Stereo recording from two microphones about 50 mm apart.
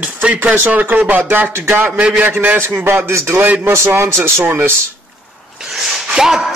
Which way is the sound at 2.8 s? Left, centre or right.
Right.